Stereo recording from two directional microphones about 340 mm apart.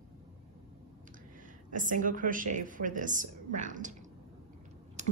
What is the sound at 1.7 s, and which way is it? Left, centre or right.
Speech, right.